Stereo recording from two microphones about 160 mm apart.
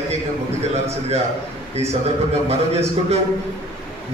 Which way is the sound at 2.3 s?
40° right (ahead or behind).